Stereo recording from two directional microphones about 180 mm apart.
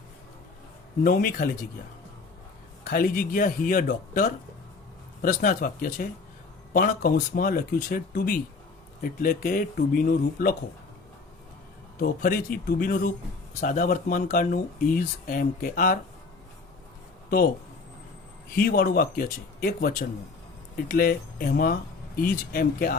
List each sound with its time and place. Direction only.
1.0 s speech: 55° left (ahead or behind)
2.8 s speech: 55° left (ahead or behind)
11.9 s speech: 55° left (ahead or behind)
17.2 s speech: 55° left (ahead or behind)
18.5 s speech: 55° left (ahead or behind)